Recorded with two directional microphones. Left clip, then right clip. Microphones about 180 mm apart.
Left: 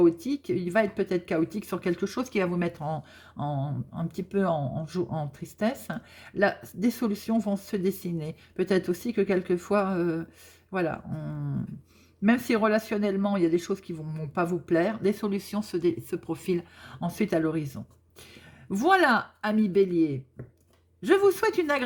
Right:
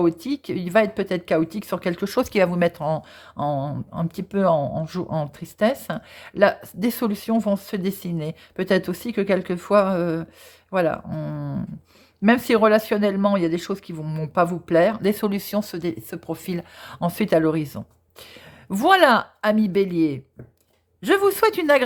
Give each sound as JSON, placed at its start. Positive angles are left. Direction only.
{"t": 0.0, "sound": "speech", "side_deg": -40}